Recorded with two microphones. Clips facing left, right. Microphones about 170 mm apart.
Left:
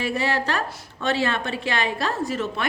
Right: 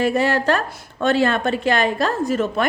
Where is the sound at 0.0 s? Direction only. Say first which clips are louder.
Right 6 dB; 50° right (ahead or behind).